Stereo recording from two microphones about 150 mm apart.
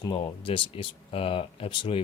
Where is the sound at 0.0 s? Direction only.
30° left (ahead or behind).